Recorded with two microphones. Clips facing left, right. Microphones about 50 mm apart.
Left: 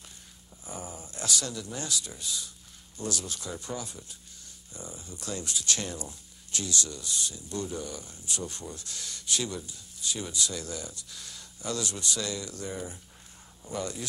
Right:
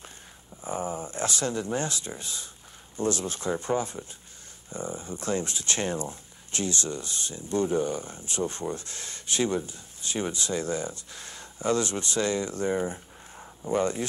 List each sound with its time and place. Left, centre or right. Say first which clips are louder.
0.7 s speech: right 10 dB; right